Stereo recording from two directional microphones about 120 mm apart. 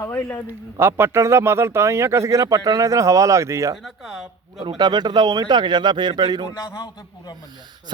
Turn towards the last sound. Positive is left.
turn(degrees=35)  # may be behind; listen again after turning